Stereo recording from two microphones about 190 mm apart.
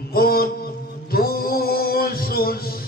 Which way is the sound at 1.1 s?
50° left (ahead or behind).